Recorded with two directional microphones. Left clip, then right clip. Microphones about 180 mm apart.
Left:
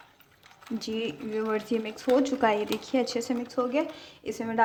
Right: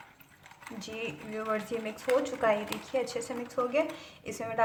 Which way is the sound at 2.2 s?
50° left (ahead or behind).